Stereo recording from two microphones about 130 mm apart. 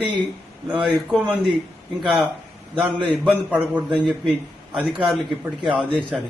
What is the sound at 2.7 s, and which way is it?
A man's voice, 5° right (ahead or behind).